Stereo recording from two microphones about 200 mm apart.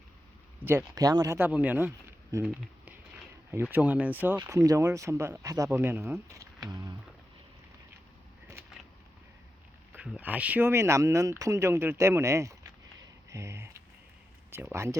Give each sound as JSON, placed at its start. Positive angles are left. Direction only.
{"t": 0.6, "sound": "speech", "side_deg": -10}
{"t": 2.3, "sound": "a sound", "side_deg": -5}
{"t": 3.5, "sound": "speech", "side_deg": -10}
{"t": 9.9, "sound": "speech", "side_deg": -5}